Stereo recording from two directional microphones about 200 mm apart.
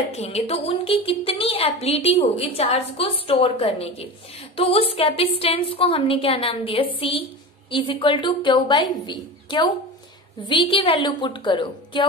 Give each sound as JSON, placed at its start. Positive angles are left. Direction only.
{"t": 0.1, "sound": "a woman's voice", "side_deg": 30}